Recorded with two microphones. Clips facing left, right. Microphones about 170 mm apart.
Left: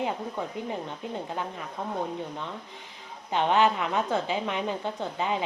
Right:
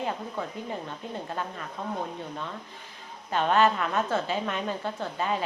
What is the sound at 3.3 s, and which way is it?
A woman's voice, 15° left (ahead or behind).